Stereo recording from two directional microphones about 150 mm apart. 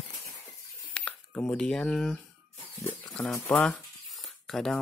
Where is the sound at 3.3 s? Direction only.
15° left (ahead or behind).